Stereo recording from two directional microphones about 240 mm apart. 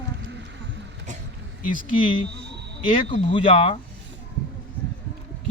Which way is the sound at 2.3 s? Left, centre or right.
Right.